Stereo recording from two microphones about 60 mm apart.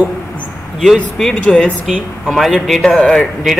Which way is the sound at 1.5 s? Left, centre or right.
Centre.